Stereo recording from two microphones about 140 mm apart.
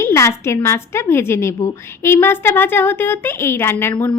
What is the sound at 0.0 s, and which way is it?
A woman's voice, 20° left (ahead or behind).